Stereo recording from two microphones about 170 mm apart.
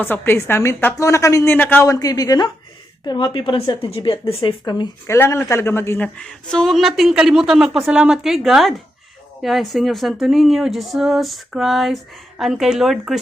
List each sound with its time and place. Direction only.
0.0 s a woman's voice: 10° left (ahead or behind)